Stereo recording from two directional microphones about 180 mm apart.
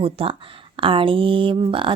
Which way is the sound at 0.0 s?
30° right (ahead or behind).